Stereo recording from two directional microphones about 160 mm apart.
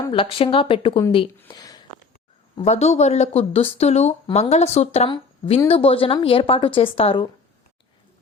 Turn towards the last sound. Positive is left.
turn(degrees=35)  # may be behind; listen again after turning